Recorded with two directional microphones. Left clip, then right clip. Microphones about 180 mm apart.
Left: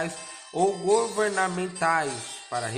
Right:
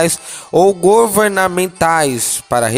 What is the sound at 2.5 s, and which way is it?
Rub, 65° right (ahead or behind).